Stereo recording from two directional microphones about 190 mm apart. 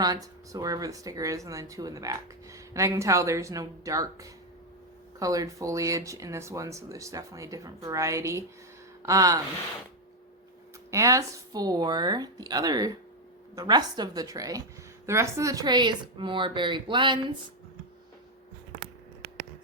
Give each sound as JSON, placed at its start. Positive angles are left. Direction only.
{"t": 0.0, "sound": "speech", "side_deg": -20}
{"t": 10.9, "sound": "speech", "side_deg": -15}